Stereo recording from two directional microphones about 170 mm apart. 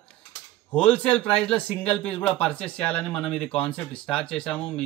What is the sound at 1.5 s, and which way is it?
Speech, 35° left (ahead or behind).